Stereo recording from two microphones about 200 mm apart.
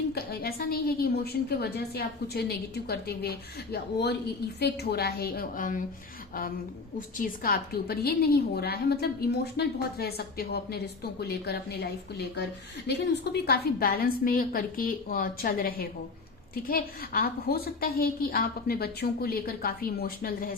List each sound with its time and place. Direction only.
0.1 s a woman's voice: 50° left (ahead or behind)
7.2 s a woman's voice: 45° left (ahead or behind)